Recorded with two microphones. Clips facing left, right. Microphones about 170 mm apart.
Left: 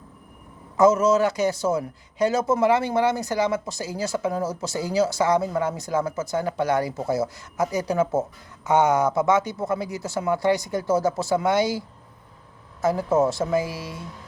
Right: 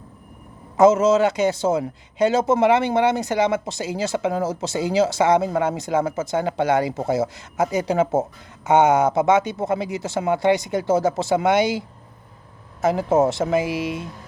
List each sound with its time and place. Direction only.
1.0 s speech: 25° right (ahead or behind)
4.2 s speech: 90° right
4.4 s speech: 25° right (ahead or behind)